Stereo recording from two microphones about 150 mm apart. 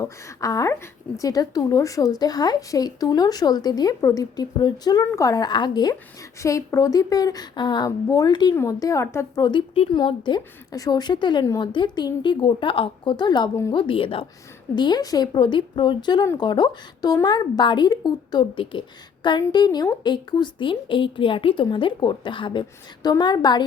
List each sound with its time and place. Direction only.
0.0 s speech: 20° left (ahead or behind)
9.5 s a woman's voice: 40° left (ahead or behind)